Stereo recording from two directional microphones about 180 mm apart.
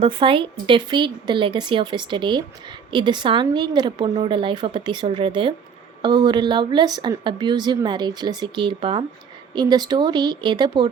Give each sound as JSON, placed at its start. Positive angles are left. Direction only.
{"t": 0.0, "sound": "a woman's voice", "side_deg": -30}